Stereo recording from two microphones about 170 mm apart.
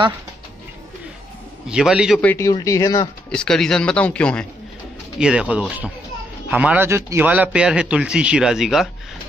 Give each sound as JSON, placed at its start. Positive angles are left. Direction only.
{"t": 1.7, "sound": "speech", "side_deg": -5}
{"t": 2.2, "sound": "speech", "side_deg": 15}
{"t": 3.3, "sound": "speech", "side_deg": 5}
{"t": 5.2, "sound": "a man's voice", "side_deg": -5}